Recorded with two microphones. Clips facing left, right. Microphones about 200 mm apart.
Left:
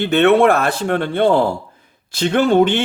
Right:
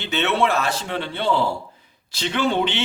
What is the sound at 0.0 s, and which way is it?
A man's voice, 55° left (ahead or behind).